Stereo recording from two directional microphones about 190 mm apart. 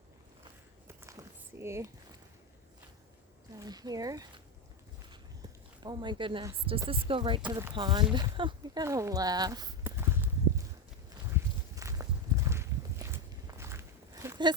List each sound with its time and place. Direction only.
0.9 s a sound: 15° right (ahead or behind)
3.6 s speech: 20° right (ahead or behind)
5.8 s speech: 25° right (ahead or behind)
11.3 s walk: 10° right (ahead or behind)